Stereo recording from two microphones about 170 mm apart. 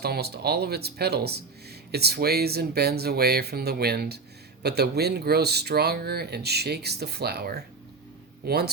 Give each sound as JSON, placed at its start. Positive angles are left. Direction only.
{"t": 0.0, "sound": "speech", "side_deg": -70}